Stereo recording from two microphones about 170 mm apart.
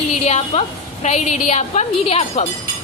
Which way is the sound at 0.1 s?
40° left (ahead or behind).